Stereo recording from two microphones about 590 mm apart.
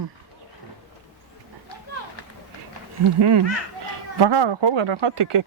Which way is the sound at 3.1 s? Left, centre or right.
Right.